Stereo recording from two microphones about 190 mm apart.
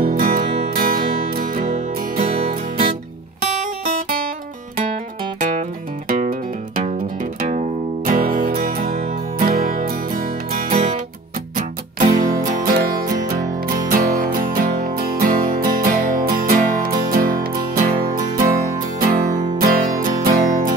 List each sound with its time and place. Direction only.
0.0 s music: 50° right (ahead or behind)
2.1 s music: 30° right (ahead or behind)
6.0 s music: 45° right (ahead or behind)
7.4 s music: 45° right (ahead or behind)
11.5 s music: 45° right (ahead or behind)